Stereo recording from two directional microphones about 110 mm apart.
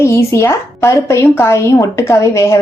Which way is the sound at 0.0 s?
25° left (ahead or behind).